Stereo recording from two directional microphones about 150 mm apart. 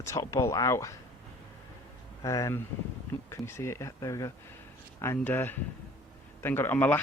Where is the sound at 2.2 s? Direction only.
20° left (ahead or behind).